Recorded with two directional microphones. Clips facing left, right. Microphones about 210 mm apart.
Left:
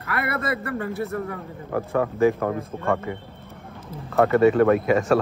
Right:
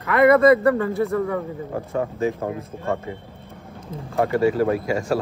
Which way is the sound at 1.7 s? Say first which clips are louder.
Left 4 dB; 80° left.